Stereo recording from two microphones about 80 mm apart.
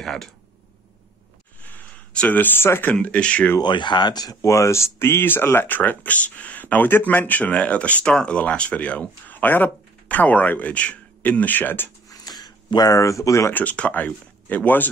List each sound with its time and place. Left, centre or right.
0.0 s speech: centre
1.6 s a sound: left
2.9 s speech: centre
3.6 s speech: left
12.1 s a sound: left
12.9 s speech: left
13.5 s speech: centre